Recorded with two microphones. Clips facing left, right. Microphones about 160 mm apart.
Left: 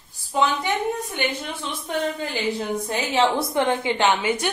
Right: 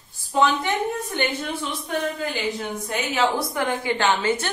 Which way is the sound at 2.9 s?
30° left (ahead or behind).